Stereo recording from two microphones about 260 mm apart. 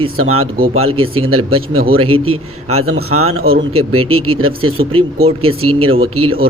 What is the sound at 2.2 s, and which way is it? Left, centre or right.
A man's voice, right.